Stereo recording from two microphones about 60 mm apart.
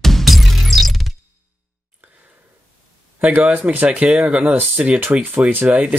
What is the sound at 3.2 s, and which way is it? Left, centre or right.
Speech, right.